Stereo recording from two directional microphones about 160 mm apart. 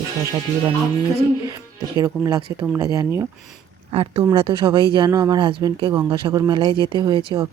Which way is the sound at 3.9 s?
35° right (ahead or behind).